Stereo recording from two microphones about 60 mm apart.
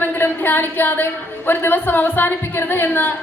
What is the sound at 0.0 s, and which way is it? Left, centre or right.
A woman's voice, left.